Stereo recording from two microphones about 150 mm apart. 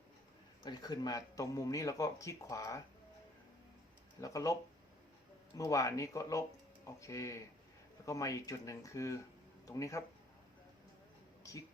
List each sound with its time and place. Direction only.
0.6 s speech: 25° left (ahead or behind)
4.2 s speech: 20° left (ahead or behind)
5.5 s speech: 20° left (ahead or behind)